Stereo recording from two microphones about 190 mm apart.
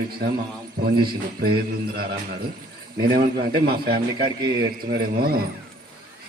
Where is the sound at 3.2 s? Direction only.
55° right (ahead or behind).